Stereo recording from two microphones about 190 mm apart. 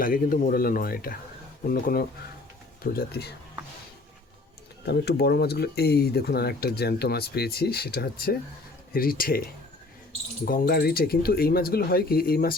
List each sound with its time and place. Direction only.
0.0 s speech: 45° left (ahead or behind)
4.9 s speech: 60° left (ahead or behind)
10.4 s speech: 50° left (ahead or behind)